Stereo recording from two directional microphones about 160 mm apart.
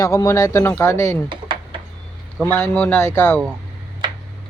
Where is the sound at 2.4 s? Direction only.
15° left (ahead or behind).